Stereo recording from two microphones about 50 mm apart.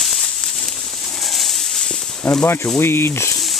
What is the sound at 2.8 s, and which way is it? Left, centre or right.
Speech, left.